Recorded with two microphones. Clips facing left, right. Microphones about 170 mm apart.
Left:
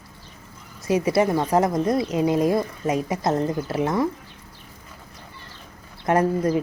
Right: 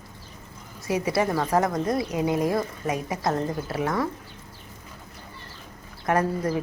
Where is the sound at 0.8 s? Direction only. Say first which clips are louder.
Left 4 dB; 20° left (ahead or behind).